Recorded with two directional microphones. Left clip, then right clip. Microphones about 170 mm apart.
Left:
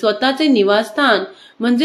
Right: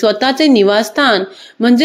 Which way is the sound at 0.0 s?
45° right (ahead or behind).